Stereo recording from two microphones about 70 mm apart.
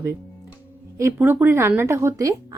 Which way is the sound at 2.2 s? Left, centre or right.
Right.